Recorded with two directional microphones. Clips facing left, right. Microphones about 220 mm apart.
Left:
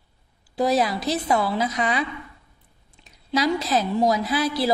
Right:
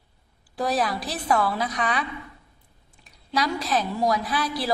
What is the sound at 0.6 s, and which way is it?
A woman's voice, 25° left (ahead or behind).